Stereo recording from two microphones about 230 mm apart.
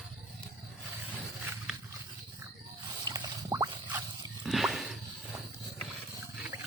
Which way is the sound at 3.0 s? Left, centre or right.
Centre.